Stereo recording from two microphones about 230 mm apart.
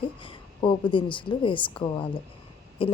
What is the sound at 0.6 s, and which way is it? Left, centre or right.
Speech, left.